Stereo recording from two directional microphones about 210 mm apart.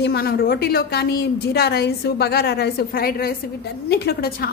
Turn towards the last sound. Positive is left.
turn(degrees=45)  # may be behind; listen again after turning